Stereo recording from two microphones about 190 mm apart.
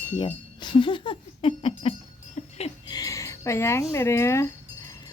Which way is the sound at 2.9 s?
15° left (ahead or behind).